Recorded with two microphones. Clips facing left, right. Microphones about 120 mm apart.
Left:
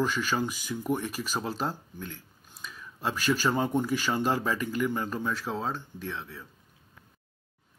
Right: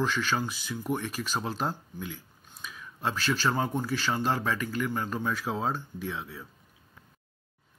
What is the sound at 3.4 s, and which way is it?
Speech, centre (ahead or behind).